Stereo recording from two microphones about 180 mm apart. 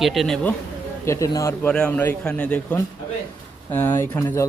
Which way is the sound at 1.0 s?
15° left (ahead or behind).